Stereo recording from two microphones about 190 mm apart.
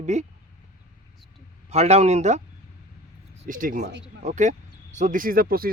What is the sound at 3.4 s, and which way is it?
Speech, 45° right (ahead or behind).